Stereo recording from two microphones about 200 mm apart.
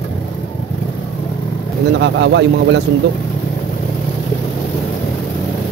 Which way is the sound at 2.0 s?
60° right (ahead or behind).